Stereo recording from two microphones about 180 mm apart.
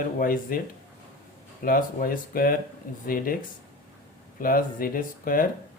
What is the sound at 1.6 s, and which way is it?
Speech, 55° left (ahead or behind).